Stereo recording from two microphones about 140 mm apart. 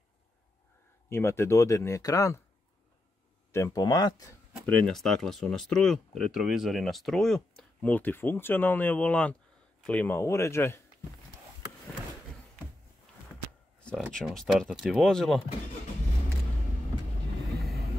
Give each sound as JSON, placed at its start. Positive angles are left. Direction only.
{"t": 1.0, "sound": "speech", "side_deg": 20}
{"t": 3.5, "sound": "speech", "side_deg": 25}
{"t": 4.6, "sound": "speech", "side_deg": 5}
{"t": 13.7, "sound": "a sound", "side_deg": 5}
{"t": 14.1, "sound": "speech", "side_deg": 0}
{"t": 17.6, "sound": "vehicle", "side_deg": 0}